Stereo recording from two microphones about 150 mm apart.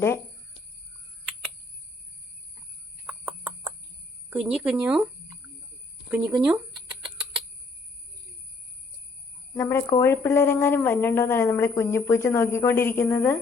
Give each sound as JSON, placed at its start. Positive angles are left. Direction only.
{"t": 3.1, "sound": "a sound", "side_deg": -10}
{"t": 4.3, "sound": "speech", "side_deg": -5}
{"t": 6.1, "sound": "speech", "side_deg": -15}
{"t": 9.6, "sound": "a woman's voice", "side_deg": 15}